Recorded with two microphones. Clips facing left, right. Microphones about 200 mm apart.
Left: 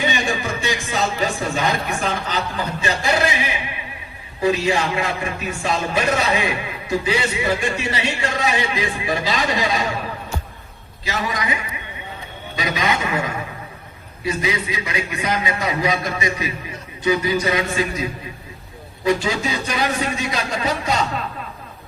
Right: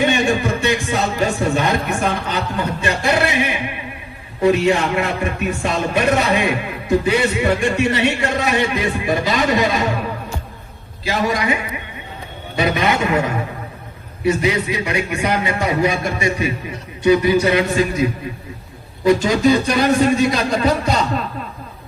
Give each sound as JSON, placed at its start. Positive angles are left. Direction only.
{"t": 0.0, "sound": "music", "side_deg": -60}
{"t": 4.4, "sound": "speech", "side_deg": -60}
{"t": 11.0, "sound": "a man's voice", "side_deg": -55}
{"t": 12.5, "sound": "speech", "side_deg": -55}
{"t": 17.0, "sound": "speech", "side_deg": -65}
{"t": 19.2, "sound": "speech", "side_deg": -45}